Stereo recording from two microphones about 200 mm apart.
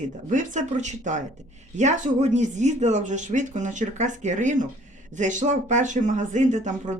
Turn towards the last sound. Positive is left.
turn(degrees=-35)  # may be behind; listen again after turning